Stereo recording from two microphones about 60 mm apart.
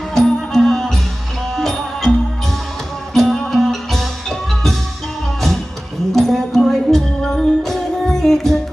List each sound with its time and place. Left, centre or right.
0.1 s music: centre
3.2 s music: centre
6.1 s a sound: centre
6.9 s music: centre